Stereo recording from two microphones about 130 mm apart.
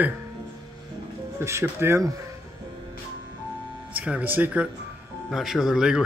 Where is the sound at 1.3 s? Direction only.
20° right (ahead or behind).